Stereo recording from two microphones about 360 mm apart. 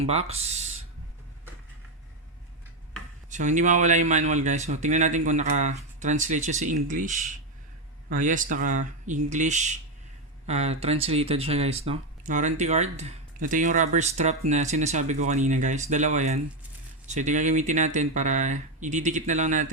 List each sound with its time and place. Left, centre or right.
0.0 s speech: centre
3.2 s speech: centre